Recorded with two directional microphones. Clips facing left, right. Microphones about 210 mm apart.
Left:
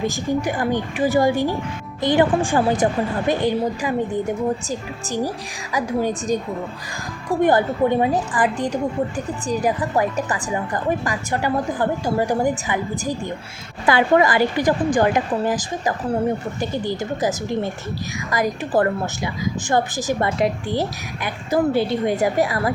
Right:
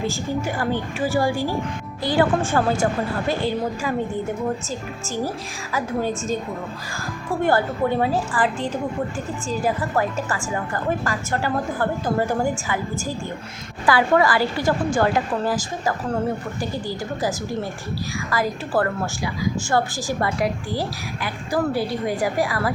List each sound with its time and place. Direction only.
0.0 s a woman's voice: 15° left (ahead or behind)